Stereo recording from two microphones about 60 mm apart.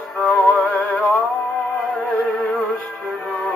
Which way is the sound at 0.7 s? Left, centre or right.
Left.